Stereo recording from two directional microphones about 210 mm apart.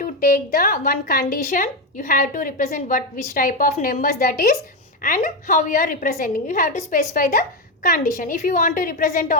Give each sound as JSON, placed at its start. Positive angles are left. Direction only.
{"t": 0.0, "sound": "a woman's voice", "side_deg": 45}